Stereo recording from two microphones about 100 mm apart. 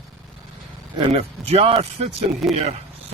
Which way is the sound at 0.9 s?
75° right (ahead or behind).